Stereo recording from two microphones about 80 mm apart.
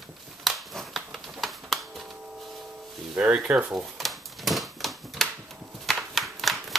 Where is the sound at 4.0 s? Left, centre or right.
Centre.